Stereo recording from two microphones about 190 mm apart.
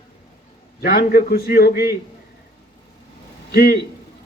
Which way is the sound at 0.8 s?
50° left (ahead or behind).